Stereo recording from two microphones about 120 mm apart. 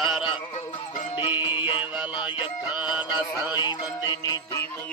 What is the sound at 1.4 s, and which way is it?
Music, 45° left (ahead or behind).